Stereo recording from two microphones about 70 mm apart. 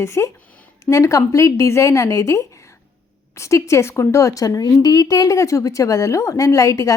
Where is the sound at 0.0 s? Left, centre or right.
Left.